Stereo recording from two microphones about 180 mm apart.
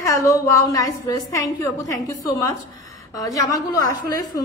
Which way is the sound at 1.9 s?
15° left (ahead or behind).